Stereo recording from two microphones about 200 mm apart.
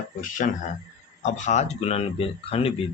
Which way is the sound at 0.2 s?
40° left (ahead or behind).